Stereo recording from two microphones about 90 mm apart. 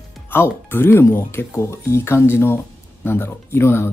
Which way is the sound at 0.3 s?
25° left (ahead or behind).